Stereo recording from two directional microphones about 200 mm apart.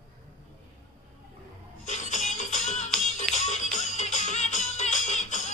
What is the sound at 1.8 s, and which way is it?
Music, 35° left (ahead or behind).